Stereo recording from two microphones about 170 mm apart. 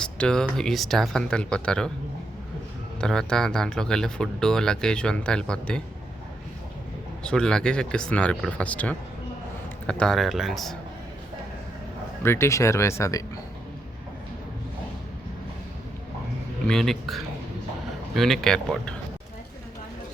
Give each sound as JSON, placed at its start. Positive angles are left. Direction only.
{"t": 0.0, "sound": "speech", "side_deg": 5}
{"t": 3.0, "sound": "speech", "side_deg": 5}
{"t": 7.3, "sound": "speech", "side_deg": 5}
{"t": 12.2, "sound": "speech", "side_deg": 15}
{"t": 16.6, "sound": "speech", "side_deg": 0}